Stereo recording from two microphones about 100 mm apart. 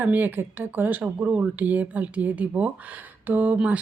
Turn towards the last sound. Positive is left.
turn(degrees=-15)  # may be behind; listen again after turning